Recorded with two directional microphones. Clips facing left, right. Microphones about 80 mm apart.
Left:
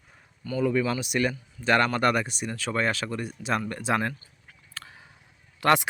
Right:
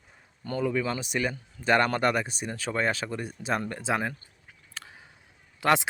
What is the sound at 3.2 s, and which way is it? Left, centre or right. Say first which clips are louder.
Speech: left 1 dB; right.